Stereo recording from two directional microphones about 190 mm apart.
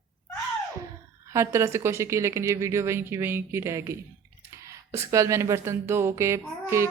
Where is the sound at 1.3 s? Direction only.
15° right (ahead or behind).